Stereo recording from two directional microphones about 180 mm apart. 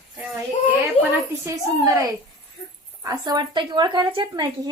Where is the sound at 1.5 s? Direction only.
20° right (ahead or behind).